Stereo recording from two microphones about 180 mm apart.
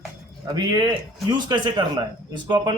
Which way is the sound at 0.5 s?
20° right (ahead or behind).